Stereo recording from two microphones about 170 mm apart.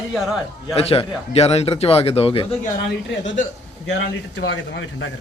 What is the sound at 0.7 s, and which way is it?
Speech, 35° left (ahead or behind).